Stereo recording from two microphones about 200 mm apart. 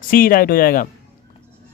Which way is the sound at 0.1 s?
45° left (ahead or behind).